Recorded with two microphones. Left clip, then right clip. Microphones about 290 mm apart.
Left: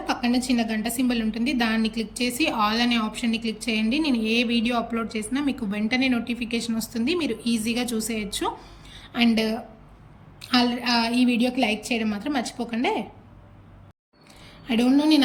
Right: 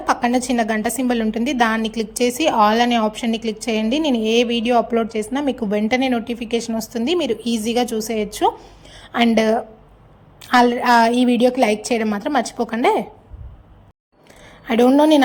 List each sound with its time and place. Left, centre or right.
0.1 s a woman's voice: centre
8.6 s a sound: centre
10.4 s a woman's voice: centre
14.6 s a woman's voice: centre